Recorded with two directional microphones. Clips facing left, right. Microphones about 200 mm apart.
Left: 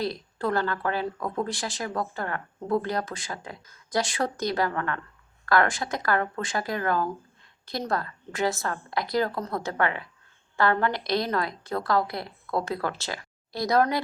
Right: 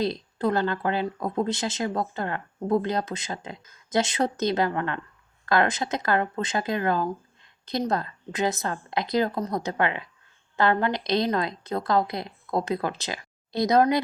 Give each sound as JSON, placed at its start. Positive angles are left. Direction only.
{"t": 0.0, "sound": "speech", "side_deg": -20}